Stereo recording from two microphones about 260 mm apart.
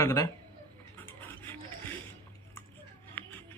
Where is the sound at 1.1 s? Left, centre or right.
Centre.